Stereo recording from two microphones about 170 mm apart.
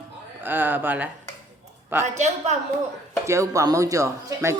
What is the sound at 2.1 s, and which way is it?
Speech, 40° right (ahead or behind).